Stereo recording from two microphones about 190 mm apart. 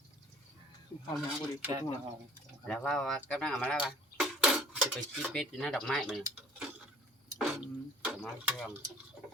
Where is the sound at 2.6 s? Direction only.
5° left (ahead or behind).